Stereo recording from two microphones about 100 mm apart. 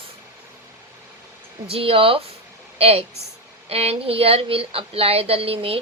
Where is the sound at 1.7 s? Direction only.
65° right (ahead or behind).